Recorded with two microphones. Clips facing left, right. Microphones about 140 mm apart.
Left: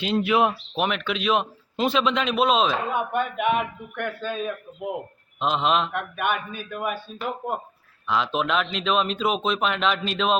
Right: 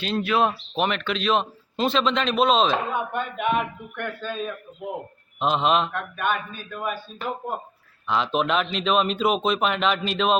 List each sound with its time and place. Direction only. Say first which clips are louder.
0.0 s speech: left 1 dB; 15° left (ahead or behind)
0.8 s a man's voice: right 1 dB; 5° left (ahead or behind)
5.9 s speech: even; 10° left (ahead or behind)
8.0 s a man's voice: right 1 dB; centre (ahead or behind)